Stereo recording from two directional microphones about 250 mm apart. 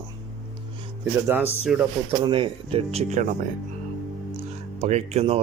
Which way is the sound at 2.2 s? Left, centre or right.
Centre.